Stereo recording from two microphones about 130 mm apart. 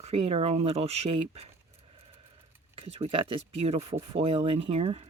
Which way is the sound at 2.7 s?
50° right (ahead or behind).